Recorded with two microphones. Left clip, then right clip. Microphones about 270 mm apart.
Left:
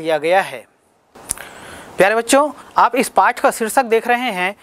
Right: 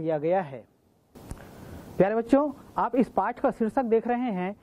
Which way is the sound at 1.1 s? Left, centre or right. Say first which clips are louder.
Left 14 dB; centre.